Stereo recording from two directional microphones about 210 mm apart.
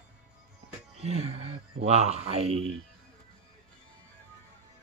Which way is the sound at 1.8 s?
30° right (ahead or behind).